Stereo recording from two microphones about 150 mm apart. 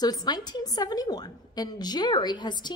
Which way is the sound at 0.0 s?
25° left (ahead or behind).